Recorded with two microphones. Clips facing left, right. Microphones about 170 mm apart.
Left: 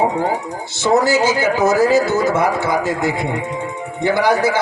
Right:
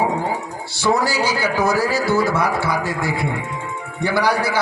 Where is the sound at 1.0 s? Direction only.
20° left (ahead or behind).